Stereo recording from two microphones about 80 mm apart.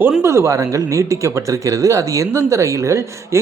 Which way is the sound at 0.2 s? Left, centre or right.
Right.